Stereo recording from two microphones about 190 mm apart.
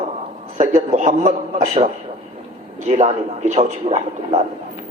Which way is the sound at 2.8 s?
35° right (ahead or behind).